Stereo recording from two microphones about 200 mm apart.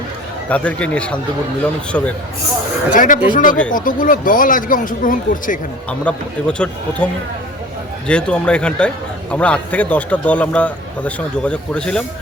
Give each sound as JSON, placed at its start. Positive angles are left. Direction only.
{"t": 0.5, "sound": "a man's voice", "side_deg": 5}
{"t": 2.9, "sound": "speech", "side_deg": 40}
{"t": 5.9, "sound": "a man's voice", "side_deg": 5}